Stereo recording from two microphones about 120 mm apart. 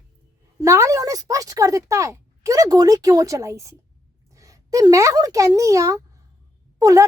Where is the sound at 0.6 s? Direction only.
25° right (ahead or behind).